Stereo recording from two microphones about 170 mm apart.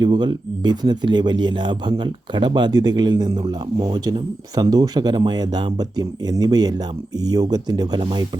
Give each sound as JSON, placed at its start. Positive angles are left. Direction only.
{"t": 0.0, "sound": "speech", "side_deg": -25}